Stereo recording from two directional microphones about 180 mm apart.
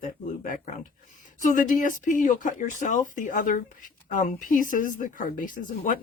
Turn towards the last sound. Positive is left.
turn(degrees=50)  # may be behind; listen again after turning